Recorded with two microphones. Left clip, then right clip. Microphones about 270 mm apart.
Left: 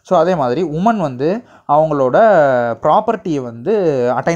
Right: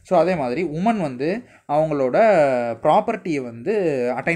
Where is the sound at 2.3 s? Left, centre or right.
Centre.